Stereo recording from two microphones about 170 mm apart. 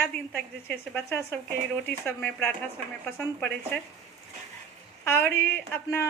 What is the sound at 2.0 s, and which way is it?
Speech, 15° left (ahead or behind).